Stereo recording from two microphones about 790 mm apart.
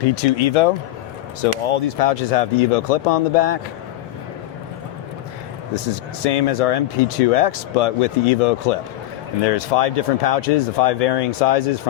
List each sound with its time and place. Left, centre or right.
0.2 s speech: left
6.2 s speech: left